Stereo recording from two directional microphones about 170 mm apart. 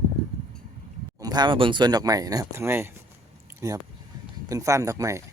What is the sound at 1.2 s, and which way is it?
Speech, 25° right (ahead or behind).